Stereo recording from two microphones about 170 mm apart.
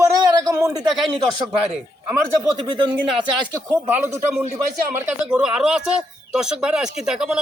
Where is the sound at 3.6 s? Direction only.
10° right (ahead or behind).